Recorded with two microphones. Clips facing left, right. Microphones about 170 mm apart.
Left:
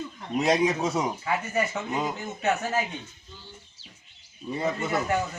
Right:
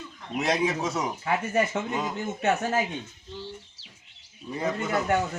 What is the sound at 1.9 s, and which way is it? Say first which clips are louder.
Speech: left 1 dB; 10° left (ahead or behind).